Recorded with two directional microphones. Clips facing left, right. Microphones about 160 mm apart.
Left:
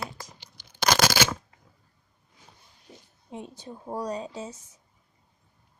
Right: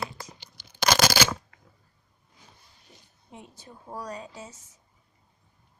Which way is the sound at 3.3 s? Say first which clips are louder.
Left 7 dB; 20° left (ahead or behind).